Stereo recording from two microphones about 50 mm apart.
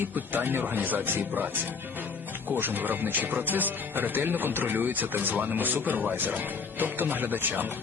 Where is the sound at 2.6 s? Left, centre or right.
Right.